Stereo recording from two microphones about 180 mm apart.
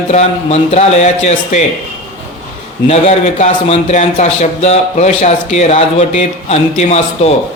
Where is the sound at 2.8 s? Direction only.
40° left (ahead or behind).